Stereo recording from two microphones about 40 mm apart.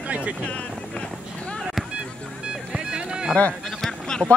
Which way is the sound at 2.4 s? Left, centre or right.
Right.